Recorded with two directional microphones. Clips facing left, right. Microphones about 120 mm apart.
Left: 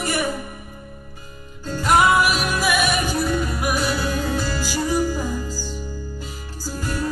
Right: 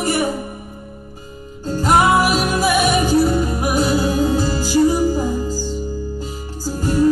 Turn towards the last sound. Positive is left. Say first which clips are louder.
# right 8 dB
turn(degrees=-25)  # may be behind; listen again after turning